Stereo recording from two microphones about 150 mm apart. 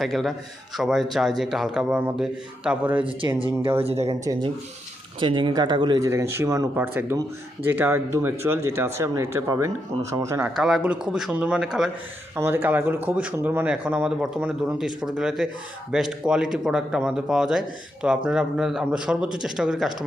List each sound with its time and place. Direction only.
0.0 s speech: centre (ahead or behind)
3.0 s speech: 35° right (ahead or behind)
4.1 s speech: 25° right (ahead or behind)
10.5 s speech: 5° right (ahead or behind)
12.4 s speech: 15° right (ahead or behind)